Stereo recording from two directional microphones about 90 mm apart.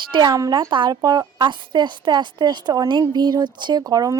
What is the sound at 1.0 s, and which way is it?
A woman's voice, 45° right (ahead or behind).